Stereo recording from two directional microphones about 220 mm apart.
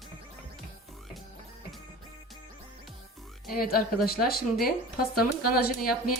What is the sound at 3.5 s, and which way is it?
Speech, 40° left (ahead or behind).